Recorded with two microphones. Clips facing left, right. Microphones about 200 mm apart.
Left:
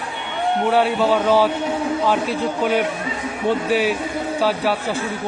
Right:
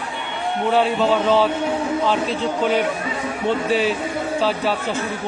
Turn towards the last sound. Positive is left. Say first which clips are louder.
# left 1 dB
turn(degrees=10)  # may be behind; listen again after turning